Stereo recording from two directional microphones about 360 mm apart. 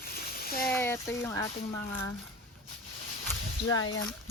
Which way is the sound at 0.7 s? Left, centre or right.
Centre.